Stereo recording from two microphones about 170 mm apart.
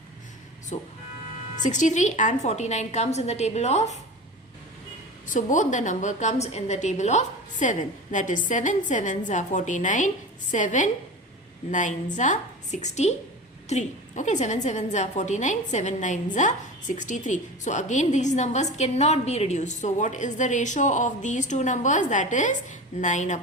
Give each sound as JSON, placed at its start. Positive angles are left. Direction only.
{"t": 0.7, "sound": "a woman's voice", "side_deg": 40}
{"t": 5.2, "sound": "a woman's voice", "side_deg": 50}